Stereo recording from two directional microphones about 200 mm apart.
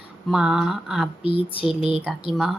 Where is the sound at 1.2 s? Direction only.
25° left (ahead or behind).